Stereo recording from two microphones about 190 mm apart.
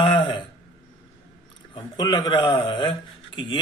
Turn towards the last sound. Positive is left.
turn(degrees=25)  # may be behind; listen again after turning